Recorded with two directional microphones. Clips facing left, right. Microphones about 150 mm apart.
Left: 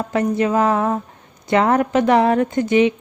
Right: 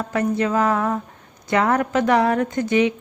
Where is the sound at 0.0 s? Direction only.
25° left (ahead or behind).